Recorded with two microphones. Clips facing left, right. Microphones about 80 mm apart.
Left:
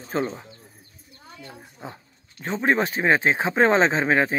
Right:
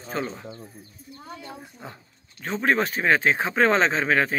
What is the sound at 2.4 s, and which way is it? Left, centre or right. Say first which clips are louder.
Speech: left 1 dB; left.